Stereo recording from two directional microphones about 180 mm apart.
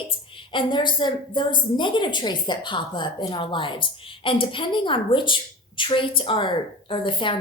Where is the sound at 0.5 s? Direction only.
25° left (ahead or behind).